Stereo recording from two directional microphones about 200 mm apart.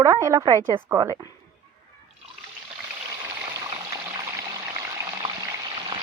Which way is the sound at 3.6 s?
20° right (ahead or behind).